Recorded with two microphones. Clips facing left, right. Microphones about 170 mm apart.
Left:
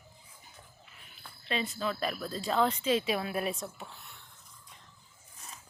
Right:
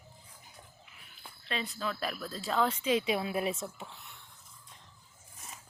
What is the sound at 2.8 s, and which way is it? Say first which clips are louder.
Speech: even; 15° right (ahead or behind).